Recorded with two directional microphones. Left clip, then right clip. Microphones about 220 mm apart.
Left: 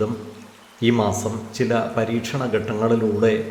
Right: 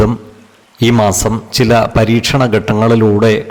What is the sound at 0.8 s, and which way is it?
A man's voice, 50° right (ahead or behind).